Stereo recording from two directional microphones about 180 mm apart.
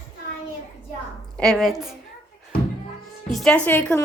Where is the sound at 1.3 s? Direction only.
Centre (ahead or behind).